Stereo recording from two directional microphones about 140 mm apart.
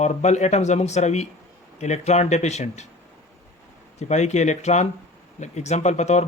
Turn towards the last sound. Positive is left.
turn(degrees=55)  # may be behind; listen again after turning